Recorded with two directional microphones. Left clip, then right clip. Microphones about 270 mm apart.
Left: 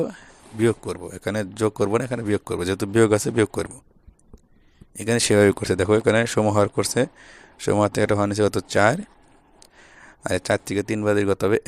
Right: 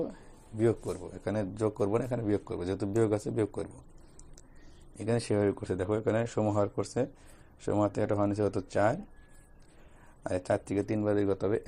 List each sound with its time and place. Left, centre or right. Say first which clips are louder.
0.6 s speech: left 7 dB; left
4.9 s speech: left 12 dB; left
10.2 s speech: left 8 dB; left